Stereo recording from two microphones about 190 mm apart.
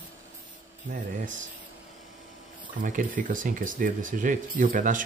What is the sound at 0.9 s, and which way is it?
Speech, 45° right (ahead or behind).